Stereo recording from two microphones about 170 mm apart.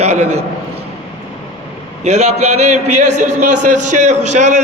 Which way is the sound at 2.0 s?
40° right (ahead or behind).